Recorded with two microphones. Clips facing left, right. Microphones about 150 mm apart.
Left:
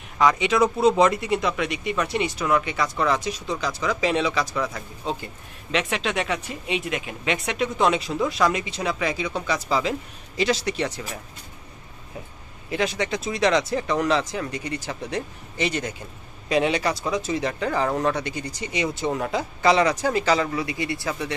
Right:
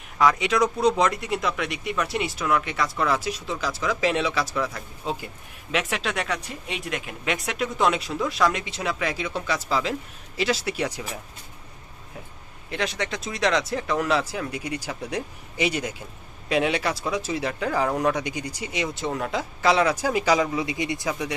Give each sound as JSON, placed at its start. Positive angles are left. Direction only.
{"t": 0.2, "sound": "speech", "side_deg": 0}
{"t": 12.7, "sound": "speech", "side_deg": 0}